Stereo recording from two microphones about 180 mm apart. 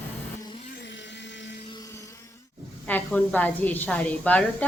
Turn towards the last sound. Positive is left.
turn(degrees=10)  # may be behind; listen again after turning